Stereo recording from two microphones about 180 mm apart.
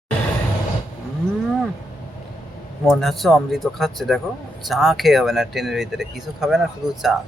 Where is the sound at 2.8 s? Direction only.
Centre (ahead or behind).